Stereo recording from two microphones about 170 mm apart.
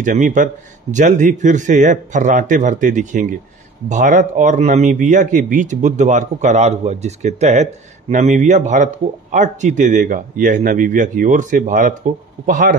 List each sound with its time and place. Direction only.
0.0 s speech: 45° right (ahead or behind)